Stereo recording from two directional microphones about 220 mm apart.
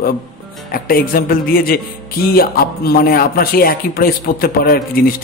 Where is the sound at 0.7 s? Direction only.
40° left (ahead or behind).